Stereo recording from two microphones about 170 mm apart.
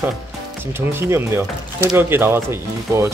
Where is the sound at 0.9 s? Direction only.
15° right (ahead or behind).